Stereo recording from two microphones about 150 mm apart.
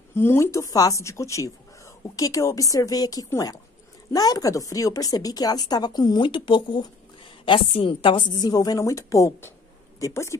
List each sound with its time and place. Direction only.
0.1 s a woman's voice: 15° left (ahead or behind)